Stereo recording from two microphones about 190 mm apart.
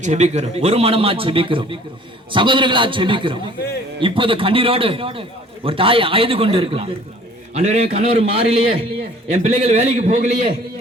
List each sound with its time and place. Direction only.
0.0 s a man's voice: 35° right (ahead or behind)